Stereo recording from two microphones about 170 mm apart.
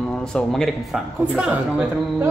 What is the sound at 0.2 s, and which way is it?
Speech, 5° left (ahead or behind).